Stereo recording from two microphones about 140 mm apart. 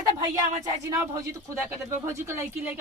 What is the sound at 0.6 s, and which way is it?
A woman's voice, 25° right (ahead or behind).